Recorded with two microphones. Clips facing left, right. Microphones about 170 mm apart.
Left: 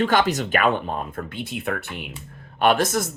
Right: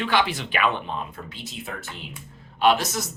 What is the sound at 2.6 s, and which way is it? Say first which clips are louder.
Speech: left 2 dB; 50° left (ahead or behind).